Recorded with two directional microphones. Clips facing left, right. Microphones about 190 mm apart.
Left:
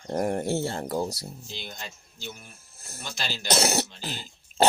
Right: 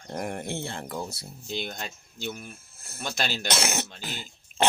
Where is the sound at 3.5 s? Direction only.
40° left (ahead or behind).